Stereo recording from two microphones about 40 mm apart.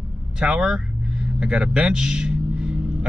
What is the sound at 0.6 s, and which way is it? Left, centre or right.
Vehicle, centre.